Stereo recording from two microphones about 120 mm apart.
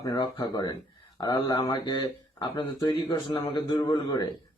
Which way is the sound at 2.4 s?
50° left (ahead or behind).